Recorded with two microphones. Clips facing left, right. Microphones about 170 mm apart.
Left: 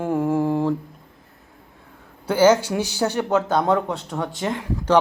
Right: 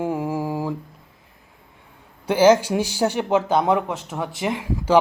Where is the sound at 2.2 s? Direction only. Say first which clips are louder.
Right 1 dB; 10° right (ahead or behind).